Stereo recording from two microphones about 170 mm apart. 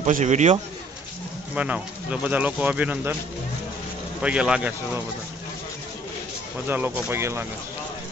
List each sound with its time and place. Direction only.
0.0 s a man's voice: 45° right (ahead or behind)
1.5 s speech: 10° right (ahead or behind)
4.2 s speech: 5° right (ahead or behind)
6.7 s speech: 15° right (ahead or behind)